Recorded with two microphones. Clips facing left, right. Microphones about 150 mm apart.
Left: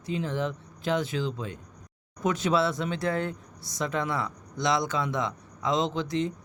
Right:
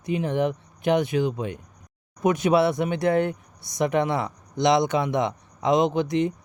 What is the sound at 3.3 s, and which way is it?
Speech, 65° right (ahead or behind).